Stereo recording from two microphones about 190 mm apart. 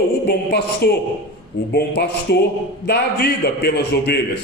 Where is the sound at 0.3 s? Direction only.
60° left (ahead or behind).